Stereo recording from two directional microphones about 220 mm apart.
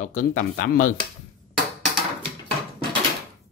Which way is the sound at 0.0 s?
35° left (ahead or behind).